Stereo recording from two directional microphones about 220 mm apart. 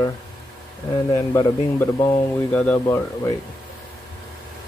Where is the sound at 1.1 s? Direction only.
15° left (ahead or behind).